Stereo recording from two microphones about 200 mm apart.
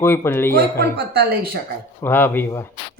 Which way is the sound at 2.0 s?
10° left (ahead or behind).